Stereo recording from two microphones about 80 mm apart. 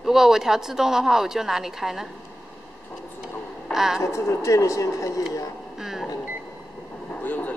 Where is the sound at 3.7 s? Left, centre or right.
Centre.